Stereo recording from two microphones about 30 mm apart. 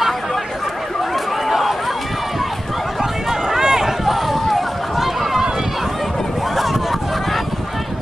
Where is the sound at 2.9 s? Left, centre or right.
Centre.